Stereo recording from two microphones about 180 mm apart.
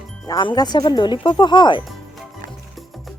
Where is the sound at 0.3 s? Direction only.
20° left (ahead or behind).